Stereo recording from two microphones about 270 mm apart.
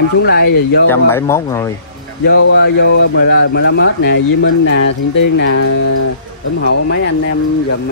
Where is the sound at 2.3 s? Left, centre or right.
Left.